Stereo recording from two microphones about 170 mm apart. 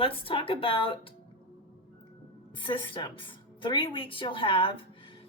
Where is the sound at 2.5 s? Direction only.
30° left (ahead or behind).